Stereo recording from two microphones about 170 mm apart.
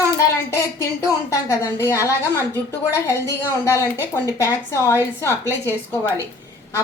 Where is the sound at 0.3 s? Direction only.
20° left (ahead or behind).